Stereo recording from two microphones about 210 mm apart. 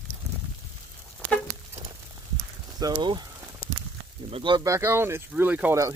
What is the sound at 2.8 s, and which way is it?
Speech, 20° right (ahead or behind).